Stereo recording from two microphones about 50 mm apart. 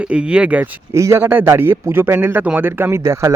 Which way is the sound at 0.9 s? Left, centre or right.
Right.